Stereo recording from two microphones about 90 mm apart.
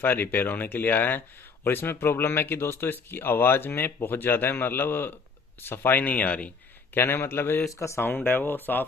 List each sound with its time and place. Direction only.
0.0 s speech: 20° left (ahead or behind)